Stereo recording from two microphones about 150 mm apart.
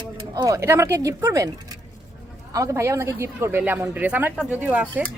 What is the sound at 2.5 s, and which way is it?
A woman's voice, 20° right (ahead or behind).